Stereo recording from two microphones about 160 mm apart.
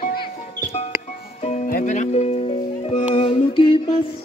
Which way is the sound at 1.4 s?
50° left (ahead or behind).